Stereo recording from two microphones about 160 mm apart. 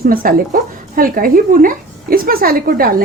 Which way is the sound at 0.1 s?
65° right (ahead or behind).